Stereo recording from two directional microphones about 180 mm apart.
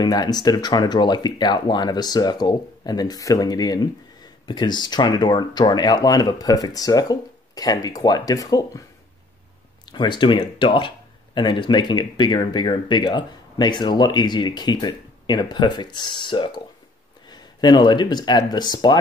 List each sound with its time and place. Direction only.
0.0 s speech: 20° left (ahead or behind)
9.8 s speech: 25° left (ahead or behind)